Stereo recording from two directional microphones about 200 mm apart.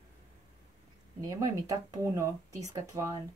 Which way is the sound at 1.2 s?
15° right (ahead or behind).